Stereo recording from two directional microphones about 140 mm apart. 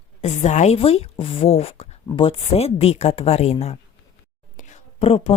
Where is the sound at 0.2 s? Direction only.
55° left (ahead or behind).